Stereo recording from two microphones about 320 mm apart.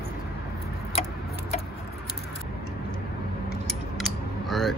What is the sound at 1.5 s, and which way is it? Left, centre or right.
Keys jangling, centre.